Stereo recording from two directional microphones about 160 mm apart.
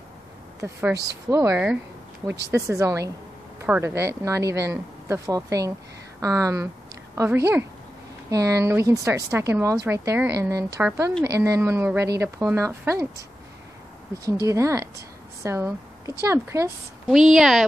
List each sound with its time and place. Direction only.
0.6 s speech: 15° right (ahead or behind)
14.2 s speech: 20° right (ahead or behind)
17.1 s a woman's voice: 5° right (ahead or behind)